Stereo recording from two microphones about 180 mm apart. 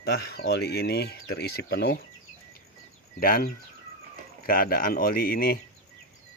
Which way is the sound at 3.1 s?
55° left (ahead or behind).